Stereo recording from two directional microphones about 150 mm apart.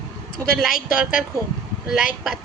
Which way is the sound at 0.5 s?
Centre (ahead or behind).